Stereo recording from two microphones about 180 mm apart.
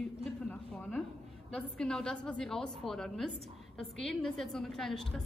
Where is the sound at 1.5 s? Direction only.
5° left (ahead or behind).